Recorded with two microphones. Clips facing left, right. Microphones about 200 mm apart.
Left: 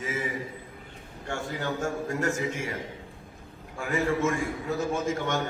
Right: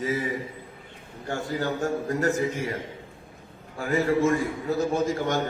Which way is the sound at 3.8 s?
35° right (ahead or behind).